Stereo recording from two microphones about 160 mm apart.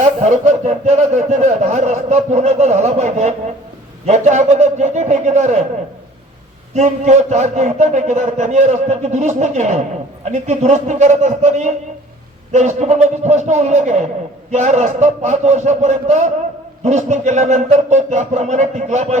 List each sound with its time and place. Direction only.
0.2 s a man's voice: 45° right (ahead or behind)
6.7 s a man's voice: 45° right (ahead or behind)